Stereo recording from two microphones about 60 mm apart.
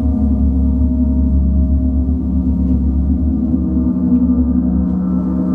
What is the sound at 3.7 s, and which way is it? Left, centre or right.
Gong, centre.